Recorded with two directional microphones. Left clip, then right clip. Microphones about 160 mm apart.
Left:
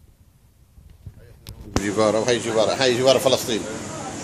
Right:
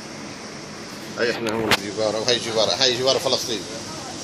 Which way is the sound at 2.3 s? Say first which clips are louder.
Even; 35° left (ahead or behind).